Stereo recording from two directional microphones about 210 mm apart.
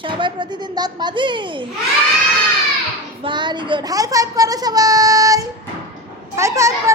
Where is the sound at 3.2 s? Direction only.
20° right (ahead or behind).